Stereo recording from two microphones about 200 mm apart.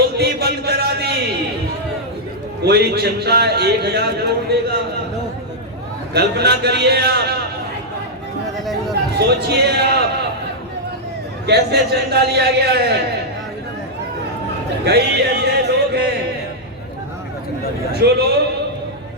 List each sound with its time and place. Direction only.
0.2 s a man's voice: 55° right (ahead or behind)
2.6 s a man's voice: 55° right (ahead or behind)
6.1 s a man's voice: 55° right (ahead or behind)
9.1 s a man's voice: 55° right (ahead or behind)
11.4 s a man's voice: 55° right (ahead or behind)
14.8 s a man's voice: 55° right (ahead or behind)
18.0 s a man's voice: 55° right (ahead or behind)